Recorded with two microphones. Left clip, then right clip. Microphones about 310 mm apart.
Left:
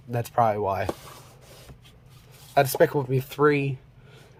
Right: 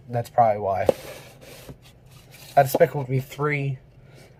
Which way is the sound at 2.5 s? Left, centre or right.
Left.